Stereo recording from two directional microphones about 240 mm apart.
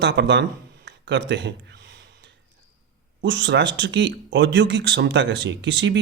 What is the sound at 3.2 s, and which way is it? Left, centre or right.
A man's voice, right.